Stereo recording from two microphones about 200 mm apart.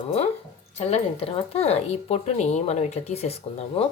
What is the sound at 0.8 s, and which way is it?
Speech, 30° left (ahead or behind).